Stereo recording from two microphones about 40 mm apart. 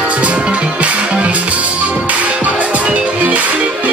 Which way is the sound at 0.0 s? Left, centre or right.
Right.